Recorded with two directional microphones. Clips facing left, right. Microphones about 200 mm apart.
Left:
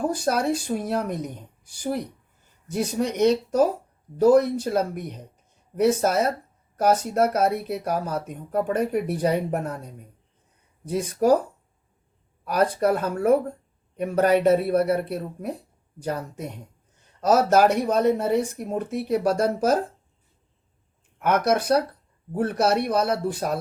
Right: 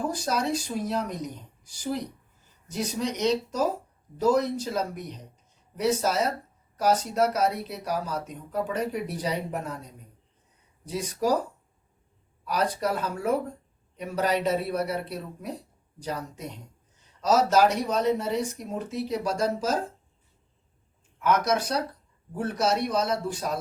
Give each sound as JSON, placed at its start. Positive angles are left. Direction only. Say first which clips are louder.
{"t": 0.1, "sound": "speech", "louder": "left 4 dB", "side_deg": 55}
{"t": 12.5, "sound": "a man's voice", "louder": "left 6 dB", "side_deg": 55}
{"t": 21.2, "sound": "speech", "louder": "left 3 dB", "side_deg": 55}